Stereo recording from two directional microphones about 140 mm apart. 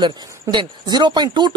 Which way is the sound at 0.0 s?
35° right (ahead or behind).